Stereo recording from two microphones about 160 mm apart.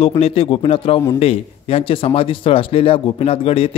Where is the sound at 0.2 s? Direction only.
40° left (ahead or behind).